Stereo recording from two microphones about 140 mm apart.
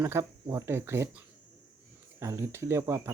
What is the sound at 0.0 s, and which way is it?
Speech, 15° right (ahead or behind).